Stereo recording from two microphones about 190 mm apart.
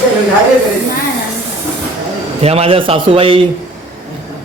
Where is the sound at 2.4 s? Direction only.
30° right (ahead or behind).